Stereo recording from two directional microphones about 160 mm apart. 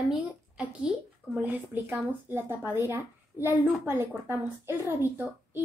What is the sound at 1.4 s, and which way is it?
Speech, 10° right (ahead or behind).